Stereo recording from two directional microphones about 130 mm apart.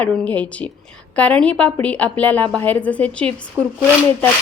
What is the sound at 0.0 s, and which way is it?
A woman's voice, 10° left (ahead or behind).